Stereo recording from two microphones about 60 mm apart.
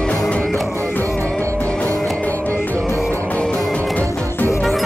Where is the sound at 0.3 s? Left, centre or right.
Centre.